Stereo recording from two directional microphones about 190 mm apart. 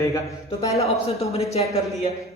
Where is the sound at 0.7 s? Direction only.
35° left (ahead or behind).